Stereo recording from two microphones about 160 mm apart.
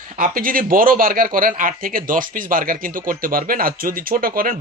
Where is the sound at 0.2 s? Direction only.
60° right (ahead or behind).